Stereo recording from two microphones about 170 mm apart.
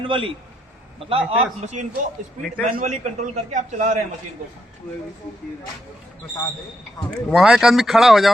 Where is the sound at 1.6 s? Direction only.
45° right (ahead or behind).